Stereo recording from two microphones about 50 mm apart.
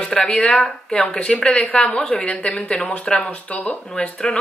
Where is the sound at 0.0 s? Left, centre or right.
Centre.